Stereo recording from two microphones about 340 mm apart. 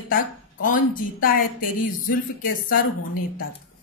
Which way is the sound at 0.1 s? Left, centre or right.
Left.